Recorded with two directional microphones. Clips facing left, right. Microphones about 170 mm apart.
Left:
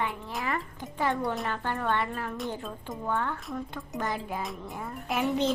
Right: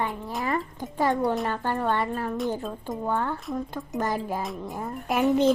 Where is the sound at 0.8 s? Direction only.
40° right (ahead or behind).